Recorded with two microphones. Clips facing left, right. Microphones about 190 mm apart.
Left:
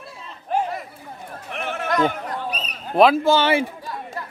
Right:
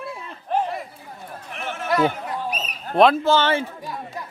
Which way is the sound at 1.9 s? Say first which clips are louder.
Right 1 dB; 5° right (ahead or behind).